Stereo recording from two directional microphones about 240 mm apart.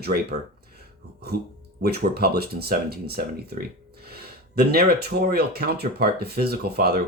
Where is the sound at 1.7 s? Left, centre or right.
Right.